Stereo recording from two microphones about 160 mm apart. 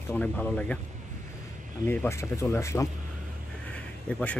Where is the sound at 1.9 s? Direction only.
15° left (ahead or behind).